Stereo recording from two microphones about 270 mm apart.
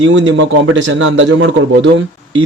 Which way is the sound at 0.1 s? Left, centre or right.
Right.